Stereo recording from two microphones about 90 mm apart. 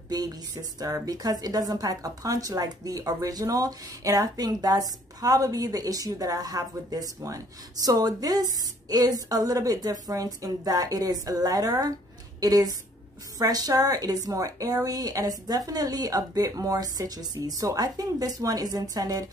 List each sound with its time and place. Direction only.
0.1 s a woman's voice: 45° right (ahead or behind)